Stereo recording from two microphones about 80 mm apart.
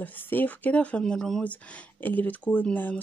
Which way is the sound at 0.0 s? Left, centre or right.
Left.